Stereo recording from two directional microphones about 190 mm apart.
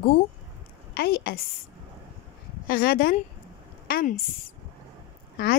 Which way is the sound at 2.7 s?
50° left (ahead or behind).